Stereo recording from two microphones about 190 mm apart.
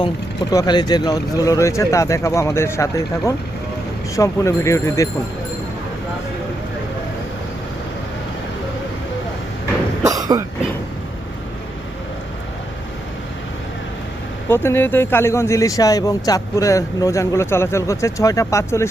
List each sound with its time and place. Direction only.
0.5 s speech: 20° left (ahead or behind)
10.0 s cough: 20° right (ahead or behind)
14.5 s speech: 10° left (ahead or behind)